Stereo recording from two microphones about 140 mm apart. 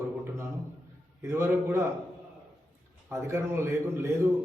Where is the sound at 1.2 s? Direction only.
20° right (ahead or behind).